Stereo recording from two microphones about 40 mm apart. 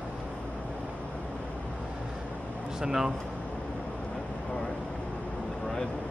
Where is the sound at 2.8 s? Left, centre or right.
Centre.